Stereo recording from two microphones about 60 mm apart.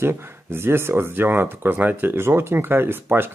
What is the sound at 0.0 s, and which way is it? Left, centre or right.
Speech, right.